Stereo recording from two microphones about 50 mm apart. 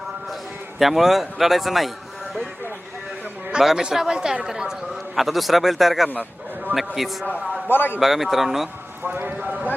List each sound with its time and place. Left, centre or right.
0.8 s speech: centre
3.6 s speech: centre
7.7 s a man's voice: left
8.0 s speech: centre
9.1 s speech: right